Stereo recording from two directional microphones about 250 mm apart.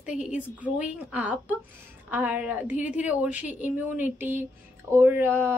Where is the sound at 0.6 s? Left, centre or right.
Centre.